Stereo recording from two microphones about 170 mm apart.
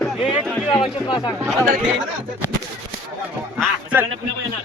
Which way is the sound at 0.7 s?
25° left (ahead or behind).